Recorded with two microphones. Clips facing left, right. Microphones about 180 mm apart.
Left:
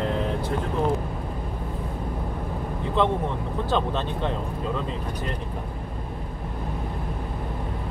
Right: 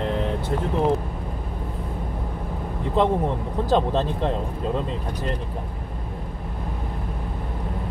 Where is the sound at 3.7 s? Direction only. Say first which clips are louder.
Right 5 dB; 35° right (ahead or behind).